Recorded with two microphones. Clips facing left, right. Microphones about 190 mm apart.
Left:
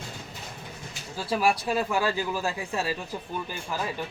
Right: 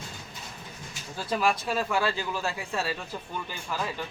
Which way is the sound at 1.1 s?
10° left (ahead or behind).